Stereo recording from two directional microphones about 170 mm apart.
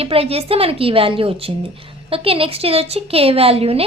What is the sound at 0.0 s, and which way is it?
A woman's voice, 35° right (ahead or behind).